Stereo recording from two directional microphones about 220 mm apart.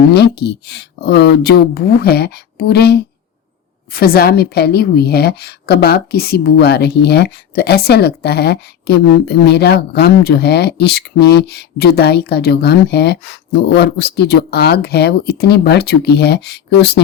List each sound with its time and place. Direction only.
0.1 s a woman's voice: 50° left (ahead or behind)